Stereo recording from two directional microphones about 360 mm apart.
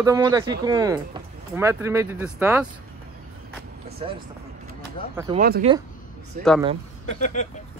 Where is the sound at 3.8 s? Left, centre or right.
Centre.